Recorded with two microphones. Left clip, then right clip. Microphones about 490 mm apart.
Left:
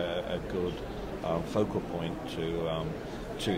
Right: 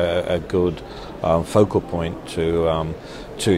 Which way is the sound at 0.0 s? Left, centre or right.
Right.